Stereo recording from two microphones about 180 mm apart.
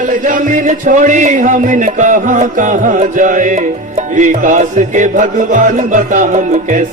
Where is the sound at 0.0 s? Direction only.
45° right (ahead or behind).